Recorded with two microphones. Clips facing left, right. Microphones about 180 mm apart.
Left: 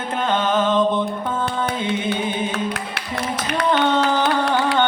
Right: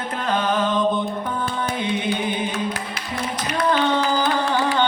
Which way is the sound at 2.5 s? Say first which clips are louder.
Left 1 dB; 60° left (ahead or behind).